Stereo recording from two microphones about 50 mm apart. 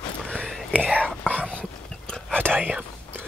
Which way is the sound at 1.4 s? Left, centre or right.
Left.